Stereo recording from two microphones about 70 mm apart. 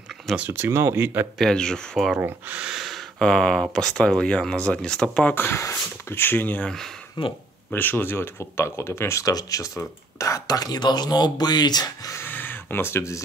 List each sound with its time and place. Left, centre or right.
0.5 s speech: right
1.4 s speech: centre
2.1 s speech: right
2.6 s gasp: centre
3.2 s speech: centre
5.3 s speech: left
6.6 s speech: centre
7.7 s speech: left
9.2 s speech: left
10.1 s speech: left
12.3 s a sound: left